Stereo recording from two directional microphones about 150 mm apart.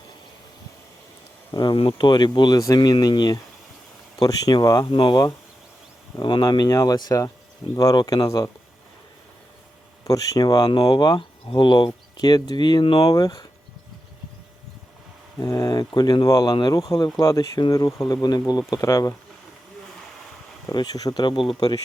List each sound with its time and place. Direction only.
1.5 s speech: 35° left (ahead or behind)
10.0 s speech: 20° left (ahead or behind)
10.6 s speech: 35° left (ahead or behind)
15.4 s speech: 25° left (ahead or behind)
20.7 s speech: 25° left (ahead or behind)